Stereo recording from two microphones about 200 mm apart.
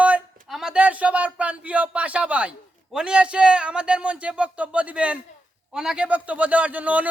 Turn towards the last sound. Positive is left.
turn(degrees=-5)  # may be behind; listen again after turning